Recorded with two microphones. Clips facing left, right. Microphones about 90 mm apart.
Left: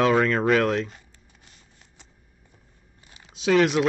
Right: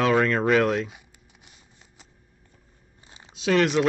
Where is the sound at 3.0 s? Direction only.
25° right (ahead or behind).